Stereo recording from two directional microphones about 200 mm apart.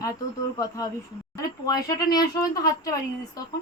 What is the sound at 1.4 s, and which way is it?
Speech, 20° left (ahead or behind).